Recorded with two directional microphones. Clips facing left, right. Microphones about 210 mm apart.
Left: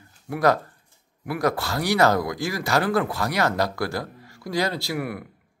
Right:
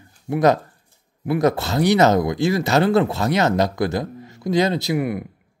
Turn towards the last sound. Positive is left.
turn(degrees=-20)  # may be behind; listen again after turning